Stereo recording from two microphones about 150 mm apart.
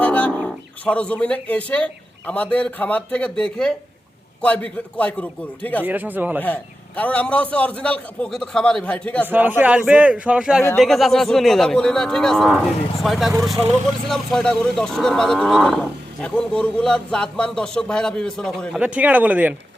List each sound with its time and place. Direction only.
0.0 s a man's voice: 10° left (ahead or behind)
5.8 s a man's voice: 10° right (ahead or behind)
6.4 s a man's voice: 10° left (ahead or behind)
9.2 s a man's voice: 10° right (ahead or behind)
10.8 s cattle: centre (ahead or behind)
13.6 s speech: 45° right (ahead or behind)
14.1 s cattle: 5° left (ahead or behind)
18.8 s a man's voice: 10° right (ahead or behind)